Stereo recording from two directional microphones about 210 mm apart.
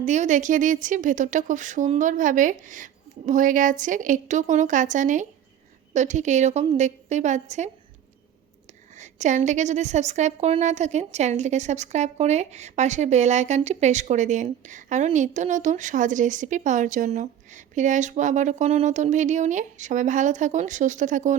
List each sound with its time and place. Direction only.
0.0 s a woman's voice: 35° right (ahead or behind)
9.0 s a woman's voice: 35° right (ahead or behind)